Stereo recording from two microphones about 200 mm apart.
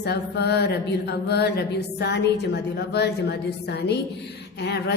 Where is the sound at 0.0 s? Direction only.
55° left (ahead or behind).